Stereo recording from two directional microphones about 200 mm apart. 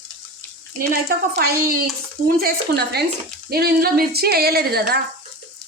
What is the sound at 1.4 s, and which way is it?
Speech, 50° right (ahead or behind).